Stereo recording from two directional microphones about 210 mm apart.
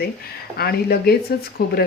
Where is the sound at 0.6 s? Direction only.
45° left (ahead or behind).